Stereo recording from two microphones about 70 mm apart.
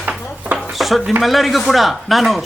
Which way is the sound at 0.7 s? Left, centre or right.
Centre.